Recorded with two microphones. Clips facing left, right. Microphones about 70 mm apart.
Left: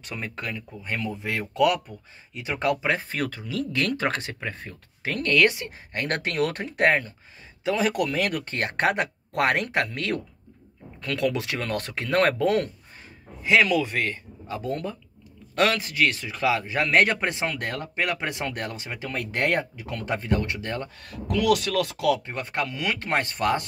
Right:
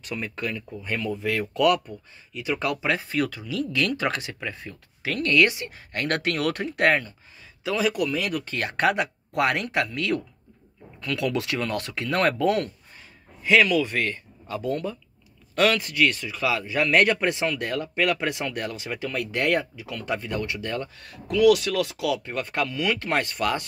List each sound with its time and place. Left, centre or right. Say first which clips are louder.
0.0 s speech: right 3 dB; left
0.5 s speech: right 2 dB; centre
1.2 s speech: right 1 dB; left
7.9 s speech: left 1 dB; left
15.6 s speech: right 1 dB; centre
21.0 s speech: right 8 dB; left
22.2 s speech: right 2 dB; left